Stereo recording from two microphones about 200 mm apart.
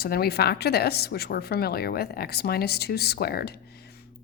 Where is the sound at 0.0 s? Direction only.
50° left (ahead or behind).